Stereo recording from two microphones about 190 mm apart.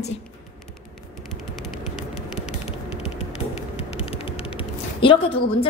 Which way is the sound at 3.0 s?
35° left (ahead or behind).